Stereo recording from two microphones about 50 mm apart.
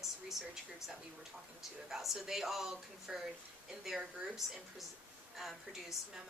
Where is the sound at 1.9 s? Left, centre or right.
Centre.